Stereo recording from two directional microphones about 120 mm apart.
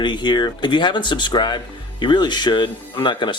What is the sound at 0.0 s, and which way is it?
Speech, 40° left (ahead or behind).